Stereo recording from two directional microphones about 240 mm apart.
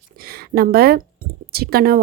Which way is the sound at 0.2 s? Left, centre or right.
Right.